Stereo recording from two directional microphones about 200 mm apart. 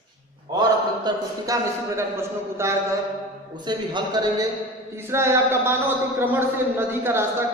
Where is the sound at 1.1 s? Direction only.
20° right (ahead or behind).